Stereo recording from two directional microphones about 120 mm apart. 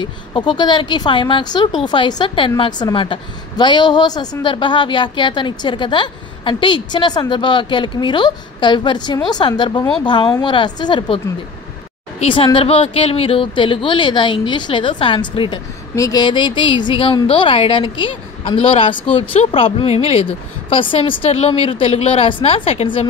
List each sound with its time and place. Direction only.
0.0 s a woman's voice: 40° left (ahead or behind)
12.2 s a woman's voice: 50° left (ahead or behind)